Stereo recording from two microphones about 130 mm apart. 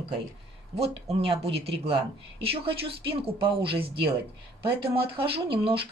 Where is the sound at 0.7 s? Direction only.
50° right (ahead or behind).